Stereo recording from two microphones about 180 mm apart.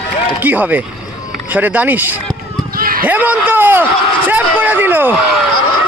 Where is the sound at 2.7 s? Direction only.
55° right (ahead or behind).